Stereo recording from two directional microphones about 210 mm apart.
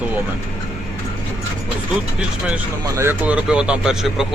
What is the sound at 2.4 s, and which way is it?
Speech, 10° right (ahead or behind).